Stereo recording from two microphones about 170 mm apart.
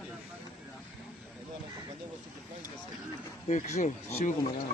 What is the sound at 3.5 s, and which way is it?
Speech, 45° left (ahead or behind).